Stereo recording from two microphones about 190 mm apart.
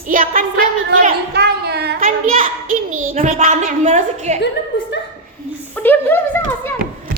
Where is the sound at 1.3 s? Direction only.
60° right (ahead or behind).